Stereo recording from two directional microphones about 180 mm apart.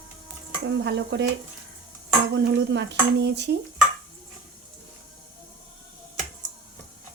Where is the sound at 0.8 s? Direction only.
70° right (ahead or behind).